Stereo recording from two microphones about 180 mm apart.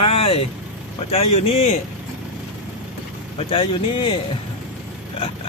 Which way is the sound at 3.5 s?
30° left (ahead or behind).